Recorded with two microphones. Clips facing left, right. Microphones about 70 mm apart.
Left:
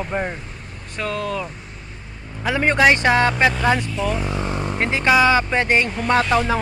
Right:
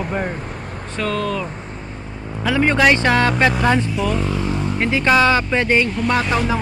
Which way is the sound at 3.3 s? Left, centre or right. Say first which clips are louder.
Right 1 dB; centre.